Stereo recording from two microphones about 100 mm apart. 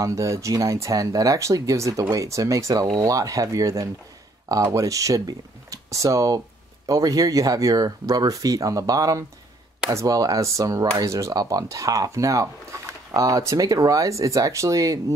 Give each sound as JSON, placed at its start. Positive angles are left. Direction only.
{"t": 0.0, "sound": "speech", "side_deg": -30}